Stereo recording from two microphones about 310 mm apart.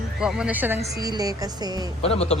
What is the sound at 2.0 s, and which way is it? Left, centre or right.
Speech, centre.